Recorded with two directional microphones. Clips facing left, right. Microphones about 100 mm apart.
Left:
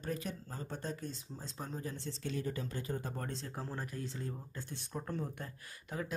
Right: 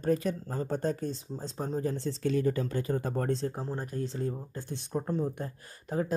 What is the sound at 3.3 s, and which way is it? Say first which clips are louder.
Speech: right 13 dB; 35° right (ahead or behind).